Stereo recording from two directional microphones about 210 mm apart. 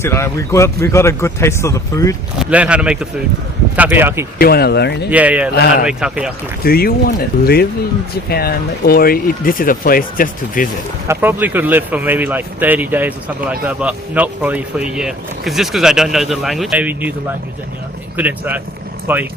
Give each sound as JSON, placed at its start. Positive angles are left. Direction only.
{"t": 0.0, "sound": "speech", "side_deg": 10}
{"t": 2.4, "sound": "speech", "side_deg": -5}
{"t": 4.4, "sound": "speech", "side_deg": 45}
{"t": 5.1, "sound": "speech", "side_deg": -5}
{"t": 6.6, "sound": "speech", "side_deg": 45}
{"t": 11.1, "sound": "speech", "side_deg": -10}
{"t": 18.2, "sound": "speech", "side_deg": -10}